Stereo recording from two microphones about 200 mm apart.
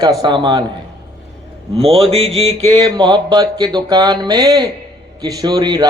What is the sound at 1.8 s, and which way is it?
A man's voice, 30° right (ahead or behind).